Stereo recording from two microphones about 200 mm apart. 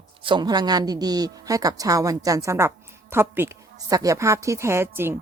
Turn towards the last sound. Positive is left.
turn(degrees=-10)  # may be behind; listen again after turning